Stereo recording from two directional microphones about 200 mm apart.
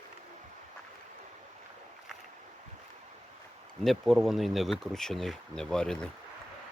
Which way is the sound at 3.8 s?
Centre (ahead or behind).